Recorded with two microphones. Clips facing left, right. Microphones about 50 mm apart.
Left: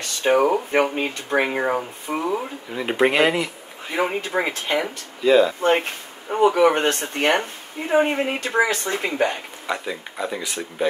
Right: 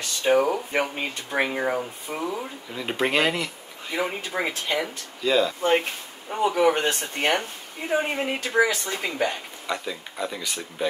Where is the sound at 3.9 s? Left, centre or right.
Left.